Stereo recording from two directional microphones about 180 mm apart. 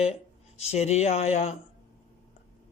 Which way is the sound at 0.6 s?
35° left (ahead or behind).